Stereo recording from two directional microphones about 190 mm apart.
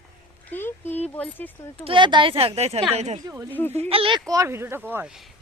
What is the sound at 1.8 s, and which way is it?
Speech, 25° right (ahead or behind).